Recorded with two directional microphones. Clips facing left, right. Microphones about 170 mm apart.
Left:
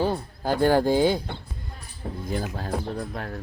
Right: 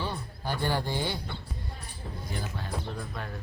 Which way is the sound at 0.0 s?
45° left (ahead or behind).